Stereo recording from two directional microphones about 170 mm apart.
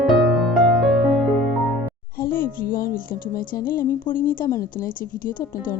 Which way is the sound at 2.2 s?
55° left (ahead or behind).